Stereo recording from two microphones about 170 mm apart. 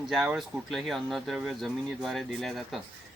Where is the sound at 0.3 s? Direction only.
Centre (ahead or behind).